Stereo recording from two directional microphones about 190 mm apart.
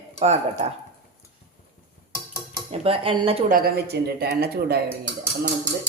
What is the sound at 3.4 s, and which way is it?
A woman's voice, 50° right (ahead or behind).